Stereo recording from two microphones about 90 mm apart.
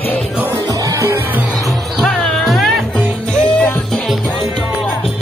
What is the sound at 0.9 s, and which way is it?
Music, 35° right (ahead or behind).